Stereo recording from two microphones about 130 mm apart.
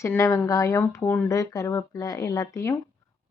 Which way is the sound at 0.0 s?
20° left (ahead or behind).